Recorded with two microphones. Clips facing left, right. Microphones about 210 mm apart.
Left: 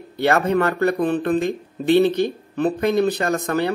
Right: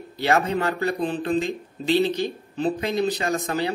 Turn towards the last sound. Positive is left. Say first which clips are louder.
# left 4 dB
turn(degrees=60)  # may be behind; listen again after turning